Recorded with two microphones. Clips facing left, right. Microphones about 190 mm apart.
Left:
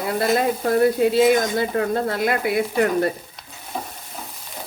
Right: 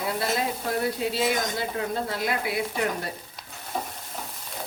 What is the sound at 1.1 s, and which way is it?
Speech, 55° left (ahead or behind).